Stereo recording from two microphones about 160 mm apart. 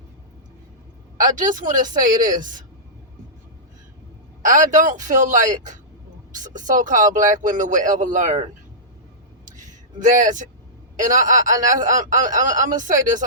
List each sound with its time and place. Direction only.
1.2 s speech: 55° right (ahead or behind)
4.4 s speech: 55° right (ahead or behind)
10.0 s speech: 55° right (ahead or behind)